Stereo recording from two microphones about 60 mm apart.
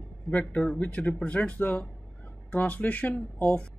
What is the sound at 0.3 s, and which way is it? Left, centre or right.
A man's voice, left.